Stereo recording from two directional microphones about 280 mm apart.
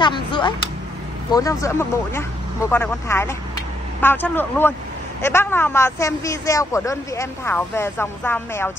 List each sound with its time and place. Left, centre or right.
0.0 s speech: centre